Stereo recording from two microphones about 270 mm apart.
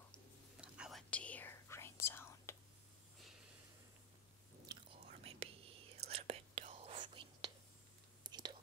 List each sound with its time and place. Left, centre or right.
0.1 s whispering: centre
5.2 s whispering: right